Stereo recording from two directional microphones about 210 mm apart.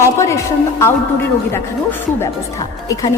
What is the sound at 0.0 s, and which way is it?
Music, 15° left (ahead or behind).